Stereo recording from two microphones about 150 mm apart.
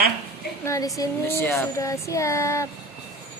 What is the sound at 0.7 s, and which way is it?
Speech, 20° left (ahead or behind).